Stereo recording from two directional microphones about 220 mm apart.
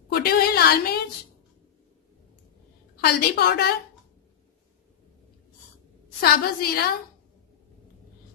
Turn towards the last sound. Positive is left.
turn(degrees=45)  # may be behind; listen again after turning